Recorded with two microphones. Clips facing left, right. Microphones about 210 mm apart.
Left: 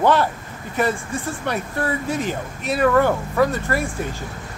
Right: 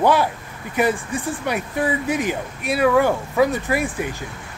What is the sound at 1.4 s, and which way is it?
Speech, 10° right (ahead or behind).